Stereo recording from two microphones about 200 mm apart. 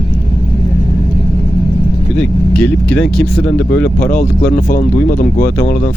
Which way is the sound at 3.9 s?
40° left (ahead or behind).